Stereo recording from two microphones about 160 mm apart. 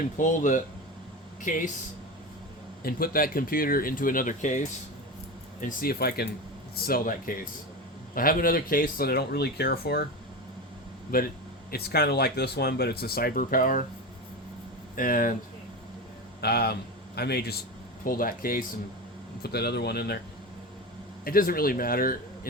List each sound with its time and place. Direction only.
0.2 s speech: 55° left (ahead or behind)
2.8 s speech: 65° left (ahead or behind); by 4.6 s 50° left (ahead or behind)
5.5 s speech: 60° left (ahead or behind); by 10.0 s 85° left
11.7 s speech: 80° left; by 13.8 s 60° left (ahead or behind)
14.9 s speech: 60° left (ahead or behind)
16.4 s a man's voice: 85° left
18.0 s speech: 60° left (ahead or behind)
19.4 s speech: 90° left
21.2 s speech: 65° left (ahead or behind)